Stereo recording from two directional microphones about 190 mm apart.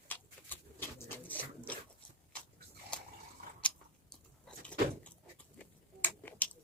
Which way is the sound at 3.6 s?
5° left (ahead or behind).